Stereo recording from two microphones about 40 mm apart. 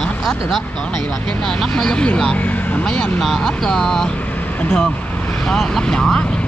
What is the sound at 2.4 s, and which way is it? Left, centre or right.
Vehicle, left.